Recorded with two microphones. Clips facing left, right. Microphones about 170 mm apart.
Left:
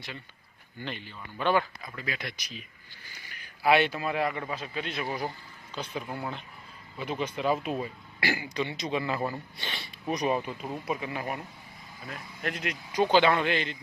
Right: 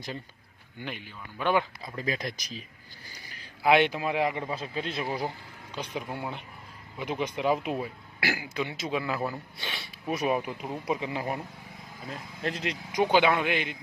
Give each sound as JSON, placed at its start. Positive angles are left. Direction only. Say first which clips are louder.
{"t": 0.8, "sound": "a man's voice", "louder": "even", "side_deg": -10}
{"t": 1.8, "sound": "speech", "louder": "right 5 dB", "side_deg": -35}
{"t": 3.6, "sound": "a man's voice", "louder": "right 1 dB", "side_deg": -15}
{"t": 5.7, "sound": "a man's voice", "louder": "right 1 dB", "side_deg": -15}
{"t": 8.2, "sound": "speech", "louder": "left 1 dB", "side_deg": -5}
{"t": 12.9, "sound": "a man's voice", "louder": "even", "side_deg": -10}